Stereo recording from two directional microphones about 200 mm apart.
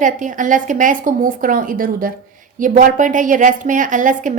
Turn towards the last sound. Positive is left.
turn(degrees=-40)  # may be behind; listen again after turning